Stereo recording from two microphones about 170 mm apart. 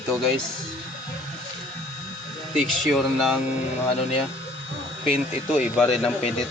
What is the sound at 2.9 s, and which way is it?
Speech, centre (ahead or behind).